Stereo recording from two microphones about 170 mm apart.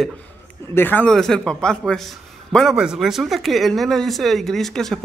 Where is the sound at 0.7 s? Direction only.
10° left (ahead or behind).